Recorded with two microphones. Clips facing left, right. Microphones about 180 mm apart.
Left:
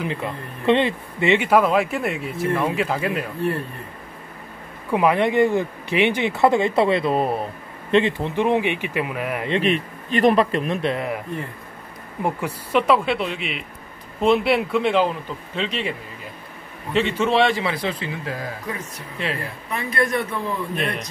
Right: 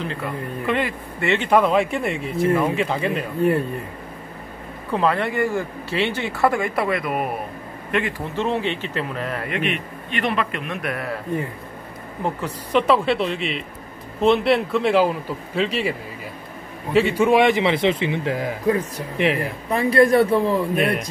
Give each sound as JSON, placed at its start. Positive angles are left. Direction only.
{"t": 0.0, "sound": "speech", "side_deg": 20}
{"t": 1.5, "sound": "a man's voice", "side_deg": 0}
{"t": 4.9, "sound": "speech", "side_deg": 15}
{"t": 8.4, "sound": "speech", "side_deg": 15}
{"t": 9.5, "sound": "a man's voice", "side_deg": 35}
{"t": 12.2, "sound": "a man's voice", "side_deg": 10}
{"t": 19.7, "sound": "a man's voice", "side_deg": -35}
{"t": 20.7, "sound": "speech", "side_deg": -10}